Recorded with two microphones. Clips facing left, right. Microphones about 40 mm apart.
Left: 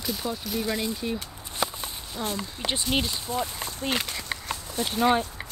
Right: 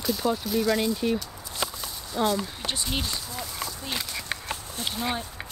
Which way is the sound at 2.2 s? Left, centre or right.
Right.